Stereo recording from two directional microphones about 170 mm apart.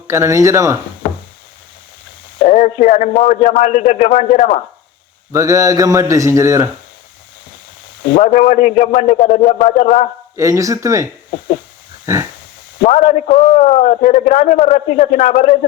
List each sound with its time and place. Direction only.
0.1 s speech: 15° right (ahead or behind)
2.4 s a man's voice: 45° left (ahead or behind)
5.3 s speech: 20° right (ahead or behind)
8.0 s a man's voice: 40° left (ahead or behind)
10.3 s speech: 20° right (ahead or behind)
12.8 s a man's voice: 45° left (ahead or behind)